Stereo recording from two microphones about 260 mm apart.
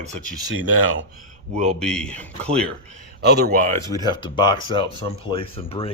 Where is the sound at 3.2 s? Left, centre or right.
Right.